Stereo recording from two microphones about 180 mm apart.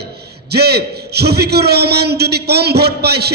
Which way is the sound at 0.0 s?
65° right (ahead or behind).